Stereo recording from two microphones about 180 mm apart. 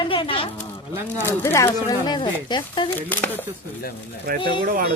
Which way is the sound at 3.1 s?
10° left (ahead or behind).